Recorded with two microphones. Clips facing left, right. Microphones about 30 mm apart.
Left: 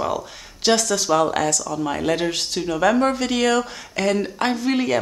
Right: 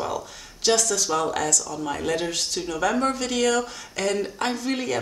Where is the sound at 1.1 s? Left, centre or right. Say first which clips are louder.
Left 7 dB; left.